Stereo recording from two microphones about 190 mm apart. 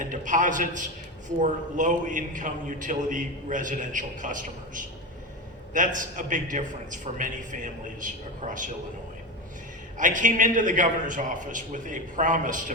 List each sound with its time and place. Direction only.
0.0 s a man's voice: 45° right (ahead or behind)
10.0 s a man's voice: 45° right (ahead or behind)